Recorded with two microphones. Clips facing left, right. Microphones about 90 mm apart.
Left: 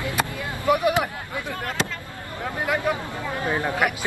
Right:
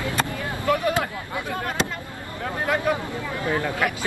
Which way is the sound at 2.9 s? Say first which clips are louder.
Right 1 dB; 20° left (ahead or behind).